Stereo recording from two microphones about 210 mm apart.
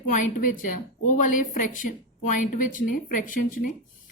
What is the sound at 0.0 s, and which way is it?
Speech, 40° left (ahead or behind).